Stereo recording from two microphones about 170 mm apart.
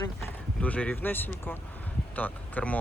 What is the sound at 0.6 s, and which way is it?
Speech, 10° left (ahead or behind).